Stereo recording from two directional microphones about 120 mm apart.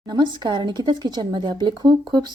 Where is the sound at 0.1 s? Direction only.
40° right (ahead or behind).